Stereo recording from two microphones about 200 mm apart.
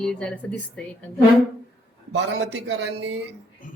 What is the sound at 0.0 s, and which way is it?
Speech, 5° left (ahead or behind).